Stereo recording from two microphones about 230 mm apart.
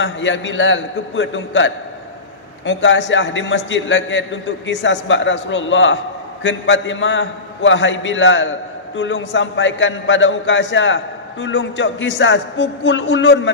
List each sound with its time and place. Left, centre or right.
0.0 s a man's voice: left